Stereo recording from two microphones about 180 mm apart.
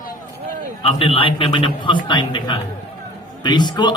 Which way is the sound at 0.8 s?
30° left (ahead or behind).